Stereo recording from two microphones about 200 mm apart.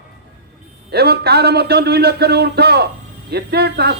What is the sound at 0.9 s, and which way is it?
A man's voice, 55° right (ahead or behind).